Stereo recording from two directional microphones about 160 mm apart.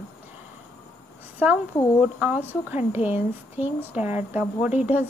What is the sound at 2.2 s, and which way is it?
Speech, 10° right (ahead or behind).